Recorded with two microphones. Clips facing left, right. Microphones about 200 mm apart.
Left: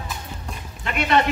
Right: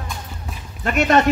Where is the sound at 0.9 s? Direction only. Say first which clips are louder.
Right 4 dB; 45° right (ahead or behind).